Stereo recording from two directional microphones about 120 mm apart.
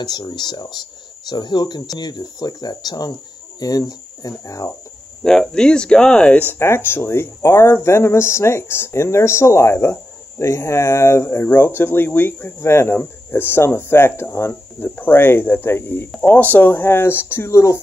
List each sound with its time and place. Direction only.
0.0 s speech: 35° left (ahead or behind)
5.2 s speech: 5° left (ahead or behind)
6.6 s speech: 20° left (ahead or behind)